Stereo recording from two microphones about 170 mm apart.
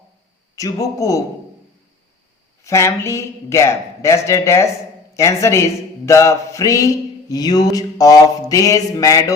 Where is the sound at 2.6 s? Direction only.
15° left (ahead or behind).